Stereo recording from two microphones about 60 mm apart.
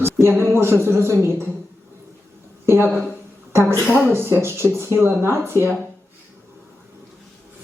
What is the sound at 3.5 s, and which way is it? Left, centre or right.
A woman's voice, right.